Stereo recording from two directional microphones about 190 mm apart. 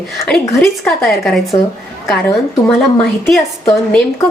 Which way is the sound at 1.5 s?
25° left (ahead or behind).